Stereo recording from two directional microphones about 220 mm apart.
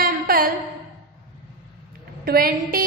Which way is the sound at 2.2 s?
40° right (ahead or behind).